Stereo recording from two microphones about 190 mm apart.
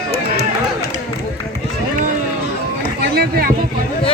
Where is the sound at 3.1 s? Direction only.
55° right (ahead or behind).